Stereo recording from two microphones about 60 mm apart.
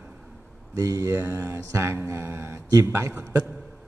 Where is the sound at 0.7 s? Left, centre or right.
Right.